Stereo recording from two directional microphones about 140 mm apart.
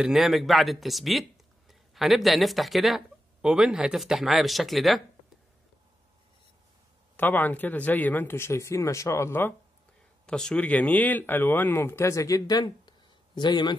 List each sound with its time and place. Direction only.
0.0 s speech: centre (ahead or behind)
7.2 s speech: 15° left (ahead or behind)
10.2 s speech: 5° left (ahead or behind); by 13.7 s 30° left (ahead or behind)